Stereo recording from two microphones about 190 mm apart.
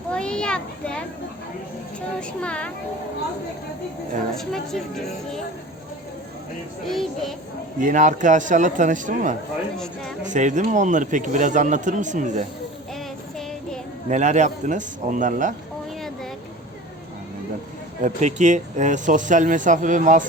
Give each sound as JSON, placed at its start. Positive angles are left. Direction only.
{"t": 0.1, "sound": "children playing", "side_deg": 5}
{"t": 2.4, "sound": "speech", "side_deg": 5}
{"t": 4.4, "sound": "speech", "side_deg": 0}
{"t": 6.8, "sound": "speech", "side_deg": 0}
{"t": 7.8, "sound": "speech", "side_deg": -40}
{"t": 9.7, "sound": "speech", "side_deg": 5}
{"t": 10.2, "sound": "speech", "side_deg": -40}
{"t": 14.1, "sound": "speech", "side_deg": -40}
{"t": 18.0, "sound": "speech", "side_deg": -40}